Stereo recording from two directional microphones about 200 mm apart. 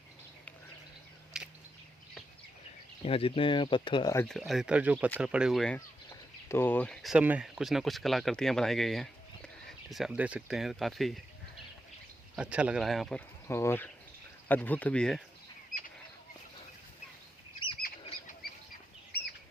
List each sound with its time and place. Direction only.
1.3 s a sound: 5° right (ahead or behind)
3.0 s speech: 30° left (ahead or behind)
4.3 s speech: centre (ahead or behind)
12.4 s speech: 5° right (ahead or behind)
17.8 s bird flight: 45° left (ahead or behind)